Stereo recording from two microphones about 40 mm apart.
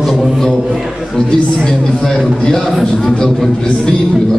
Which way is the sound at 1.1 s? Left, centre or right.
Centre.